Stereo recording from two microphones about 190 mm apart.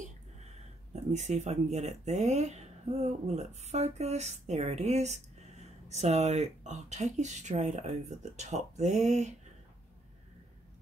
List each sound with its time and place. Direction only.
1.1 s speech: 35° right (ahead or behind)